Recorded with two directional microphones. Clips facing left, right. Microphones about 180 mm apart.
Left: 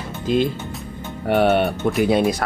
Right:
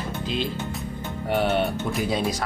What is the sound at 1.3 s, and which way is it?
Speech, 65° left (ahead or behind).